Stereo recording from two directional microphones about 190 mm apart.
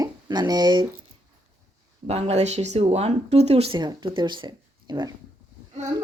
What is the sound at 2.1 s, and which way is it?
A woman's voice, 35° right (ahead or behind).